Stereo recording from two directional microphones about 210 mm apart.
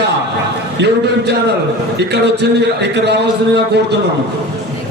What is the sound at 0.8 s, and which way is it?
A man's voice, 55° right (ahead or behind).